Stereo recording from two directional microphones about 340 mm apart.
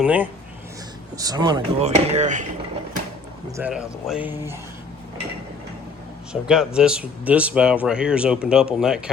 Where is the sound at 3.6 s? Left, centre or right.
Centre.